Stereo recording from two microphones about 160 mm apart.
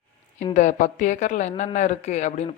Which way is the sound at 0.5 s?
50° left (ahead or behind).